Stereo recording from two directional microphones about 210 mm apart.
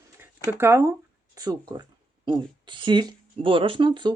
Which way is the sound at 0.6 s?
15° right (ahead or behind).